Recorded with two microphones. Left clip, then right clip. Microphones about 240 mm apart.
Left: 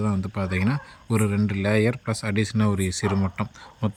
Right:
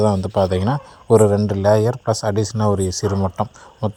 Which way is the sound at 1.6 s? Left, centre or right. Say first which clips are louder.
Right 7 dB; right.